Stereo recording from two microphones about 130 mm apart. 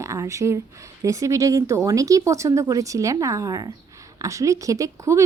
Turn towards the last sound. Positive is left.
turn(degrees=-25)  # may be behind; listen again after turning